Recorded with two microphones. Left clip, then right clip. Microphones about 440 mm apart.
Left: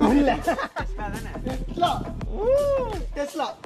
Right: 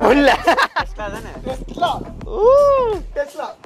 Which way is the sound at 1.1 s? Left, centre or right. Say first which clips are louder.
Right 5 dB; centre.